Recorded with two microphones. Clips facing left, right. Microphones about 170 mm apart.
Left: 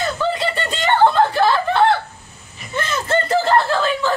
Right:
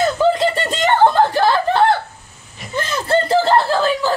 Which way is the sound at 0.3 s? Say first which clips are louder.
Right 5 dB; 45° right (ahead or behind).